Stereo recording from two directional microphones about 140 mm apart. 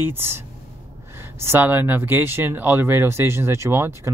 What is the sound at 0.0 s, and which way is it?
Speech, 15° right (ahead or behind).